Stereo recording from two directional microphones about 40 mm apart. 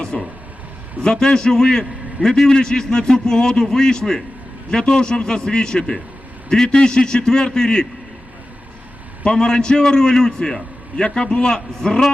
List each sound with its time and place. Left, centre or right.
0.1 s a man's voice: left
9.2 s a man's voice: centre